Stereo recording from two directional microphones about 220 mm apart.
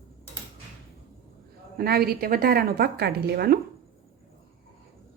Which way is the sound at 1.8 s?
45° right (ahead or behind).